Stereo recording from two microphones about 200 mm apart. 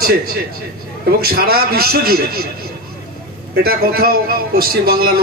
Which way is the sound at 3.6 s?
50° right (ahead or behind).